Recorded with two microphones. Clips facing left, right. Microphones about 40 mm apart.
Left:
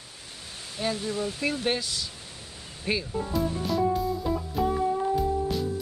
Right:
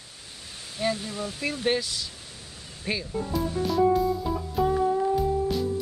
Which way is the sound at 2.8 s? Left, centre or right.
Centre.